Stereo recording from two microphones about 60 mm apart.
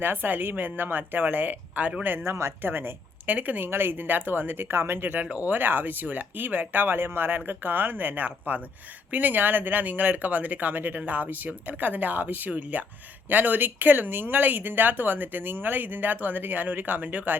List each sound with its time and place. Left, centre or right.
0.0 s speech: right
2.0 s speech: right
2.6 s speech: right